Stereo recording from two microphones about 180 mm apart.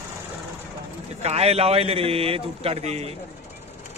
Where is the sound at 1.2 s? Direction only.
35° right (ahead or behind).